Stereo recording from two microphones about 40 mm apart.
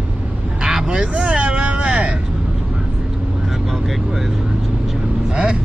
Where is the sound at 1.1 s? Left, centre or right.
Right.